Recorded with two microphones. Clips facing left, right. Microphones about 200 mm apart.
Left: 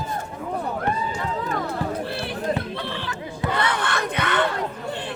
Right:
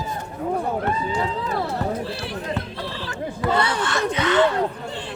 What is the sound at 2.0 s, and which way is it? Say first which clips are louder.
Music: even; 55° left (ahead or behind).